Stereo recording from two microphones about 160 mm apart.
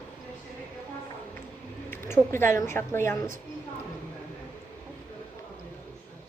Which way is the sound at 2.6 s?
15° left (ahead or behind).